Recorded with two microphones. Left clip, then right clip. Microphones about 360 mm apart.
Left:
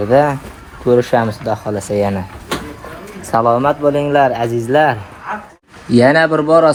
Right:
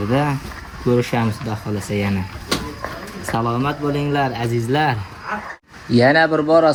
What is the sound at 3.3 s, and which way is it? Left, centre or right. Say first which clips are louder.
A man's voice: left 9 dB; centre.